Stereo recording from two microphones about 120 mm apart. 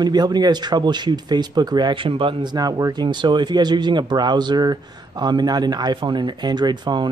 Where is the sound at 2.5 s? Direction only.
35° right (ahead or behind).